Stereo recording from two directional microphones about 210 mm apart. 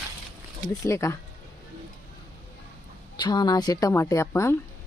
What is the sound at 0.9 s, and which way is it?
Speech, 15° left (ahead or behind).